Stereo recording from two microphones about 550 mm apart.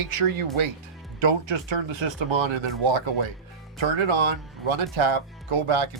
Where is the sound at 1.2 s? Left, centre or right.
Right.